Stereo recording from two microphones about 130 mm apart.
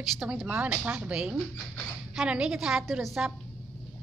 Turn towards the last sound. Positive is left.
turn(degrees=-5)  # may be behind; listen again after turning